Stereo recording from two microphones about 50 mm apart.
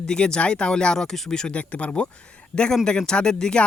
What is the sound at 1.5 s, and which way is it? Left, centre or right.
Speech, left.